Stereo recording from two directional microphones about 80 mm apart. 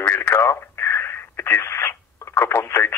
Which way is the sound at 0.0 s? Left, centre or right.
Left.